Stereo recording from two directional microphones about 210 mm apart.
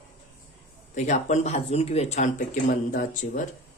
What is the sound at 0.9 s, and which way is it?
Speech, 35° left (ahead or behind).